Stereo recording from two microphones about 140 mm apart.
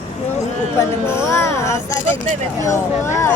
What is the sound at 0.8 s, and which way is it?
Speech, 20° left (ahead or behind).